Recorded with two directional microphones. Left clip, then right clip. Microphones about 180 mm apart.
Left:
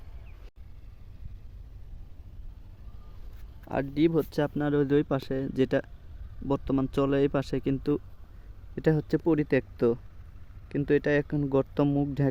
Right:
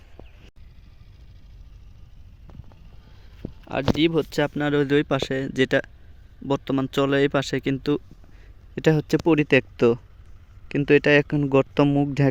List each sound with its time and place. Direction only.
3.7 s speech: centre (ahead or behind); by 12.3 s 20° right (ahead or behind)